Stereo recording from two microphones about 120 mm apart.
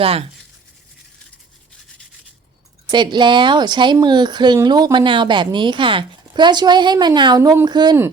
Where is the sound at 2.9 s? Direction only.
40° right (ahead or behind).